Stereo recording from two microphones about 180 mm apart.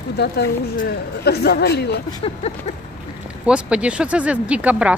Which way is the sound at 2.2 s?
35° left (ahead or behind).